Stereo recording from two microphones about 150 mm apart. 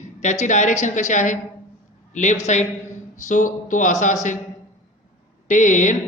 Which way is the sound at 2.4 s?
50° left (ahead or behind).